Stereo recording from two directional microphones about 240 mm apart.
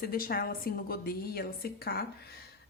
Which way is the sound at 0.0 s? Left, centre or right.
Left.